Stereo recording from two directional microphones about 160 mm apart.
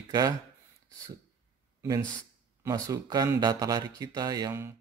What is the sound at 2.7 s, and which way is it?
Speech, 20° right (ahead or behind).